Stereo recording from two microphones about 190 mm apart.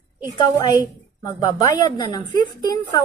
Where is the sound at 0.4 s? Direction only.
25° left (ahead or behind).